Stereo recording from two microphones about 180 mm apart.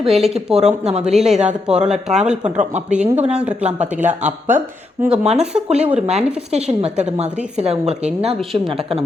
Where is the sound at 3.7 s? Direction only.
40° right (ahead or behind).